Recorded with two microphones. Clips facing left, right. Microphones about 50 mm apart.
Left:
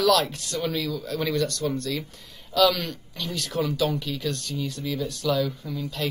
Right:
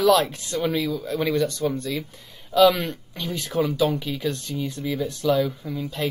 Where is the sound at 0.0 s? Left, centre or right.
Centre.